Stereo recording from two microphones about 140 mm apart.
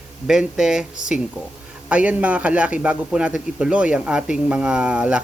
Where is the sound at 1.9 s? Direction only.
10° right (ahead or behind).